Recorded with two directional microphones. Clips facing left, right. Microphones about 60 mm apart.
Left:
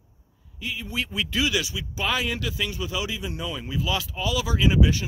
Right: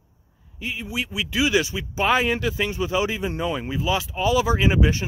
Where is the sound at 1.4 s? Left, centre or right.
Right.